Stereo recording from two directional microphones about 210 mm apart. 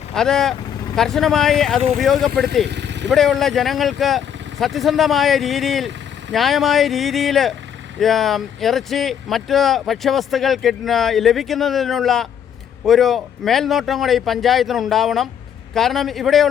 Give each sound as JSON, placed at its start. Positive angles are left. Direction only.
{"t": 0.1, "sound": "speech", "side_deg": 0}
{"t": 2.6, "sound": "vehicle", "side_deg": -55}
{"t": 3.1, "sound": "speech", "side_deg": 0}